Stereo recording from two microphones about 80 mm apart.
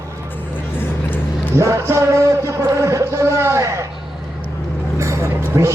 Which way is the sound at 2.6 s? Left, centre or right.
Right.